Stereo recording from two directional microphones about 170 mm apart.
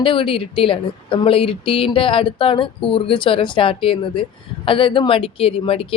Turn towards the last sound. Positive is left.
turn(degrees=30)  # may be behind; listen again after turning